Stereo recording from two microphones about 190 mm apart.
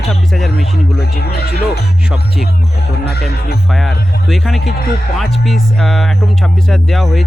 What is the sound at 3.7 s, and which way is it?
Speech, centre (ahead or behind).